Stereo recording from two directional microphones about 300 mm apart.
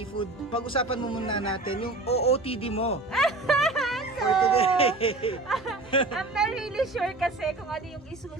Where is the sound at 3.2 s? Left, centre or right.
Centre.